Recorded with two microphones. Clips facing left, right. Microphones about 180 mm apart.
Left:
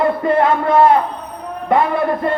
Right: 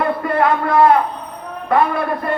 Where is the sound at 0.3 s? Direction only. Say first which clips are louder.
Left 2 dB; 25° left (ahead or behind).